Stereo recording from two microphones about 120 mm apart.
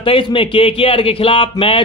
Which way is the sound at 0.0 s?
45° left (ahead or behind).